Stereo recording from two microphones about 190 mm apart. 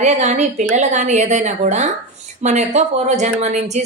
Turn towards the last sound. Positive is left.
turn(degrees=-35)  # may be behind; listen again after turning